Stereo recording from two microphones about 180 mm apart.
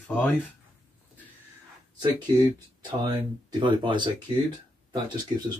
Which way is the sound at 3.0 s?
25° right (ahead or behind).